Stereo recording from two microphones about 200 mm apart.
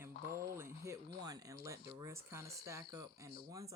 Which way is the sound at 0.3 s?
15° right (ahead or behind).